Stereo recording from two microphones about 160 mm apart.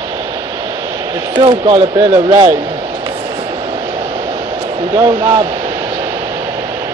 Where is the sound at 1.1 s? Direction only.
30° right (ahead or behind).